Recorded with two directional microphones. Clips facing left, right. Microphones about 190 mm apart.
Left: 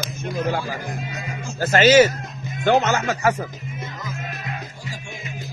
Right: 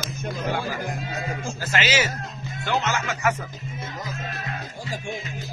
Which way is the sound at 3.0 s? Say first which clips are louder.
Left 4 dB; 35° left (ahead or behind).